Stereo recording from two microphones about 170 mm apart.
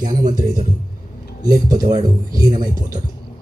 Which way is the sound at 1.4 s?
20° right (ahead or behind).